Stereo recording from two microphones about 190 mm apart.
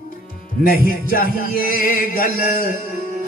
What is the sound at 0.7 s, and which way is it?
Music, 50° left (ahead or behind).